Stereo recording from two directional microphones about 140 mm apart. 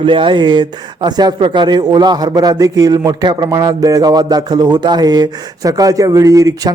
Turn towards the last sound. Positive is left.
turn(degrees=-25)  # may be behind; listen again after turning